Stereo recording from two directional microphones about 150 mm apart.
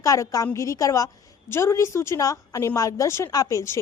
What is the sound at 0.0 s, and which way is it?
A woman's voice, 20° left (ahead or behind).